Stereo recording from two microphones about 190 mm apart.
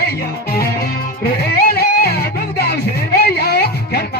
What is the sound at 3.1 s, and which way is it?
Music, 60° left (ahead or behind).